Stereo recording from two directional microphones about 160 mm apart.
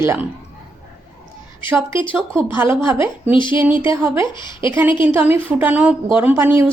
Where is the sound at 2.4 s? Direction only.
15° right (ahead or behind).